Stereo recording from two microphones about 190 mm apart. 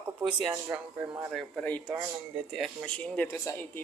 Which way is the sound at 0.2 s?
5° right (ahead or behind).